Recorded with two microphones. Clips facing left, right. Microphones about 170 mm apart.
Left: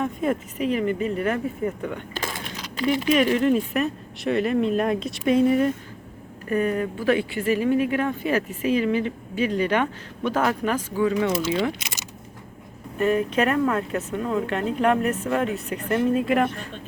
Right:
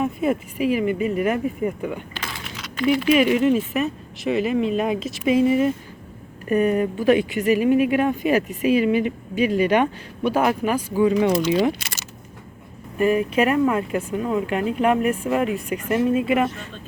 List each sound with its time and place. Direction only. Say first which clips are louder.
0.0 s speech: right 3 dB; 5° right (ahead or behind)
2.1 s a sound: left 2 dB; 45° left (ahead or behind)
3.1 s speech: right 2 dB; 5° right (ahead or behind)
6.5 s speech: right 4 dB; 15° right (ahead or behind)
11.7 s a sound: right 3 dB; 20° left (ahead or behind)
13.0 s speech: right 2 dB; 10° right (ahead or behind)